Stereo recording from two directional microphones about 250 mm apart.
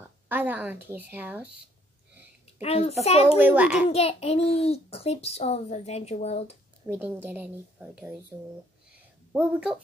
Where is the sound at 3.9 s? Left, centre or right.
Left.